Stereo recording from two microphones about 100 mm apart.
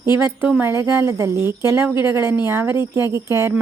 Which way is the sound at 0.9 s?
30° right (ahead or behind).